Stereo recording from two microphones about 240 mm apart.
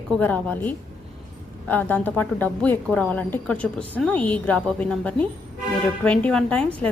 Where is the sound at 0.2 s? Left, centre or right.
Centre.